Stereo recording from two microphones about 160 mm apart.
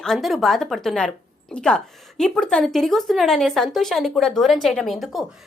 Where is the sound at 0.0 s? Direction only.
Centre (ahead or behind).